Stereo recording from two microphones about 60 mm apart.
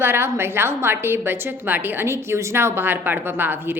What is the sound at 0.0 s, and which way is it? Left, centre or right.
A woman's voice, right.